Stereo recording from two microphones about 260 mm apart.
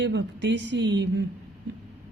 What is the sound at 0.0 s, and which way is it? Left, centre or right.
Speech, right.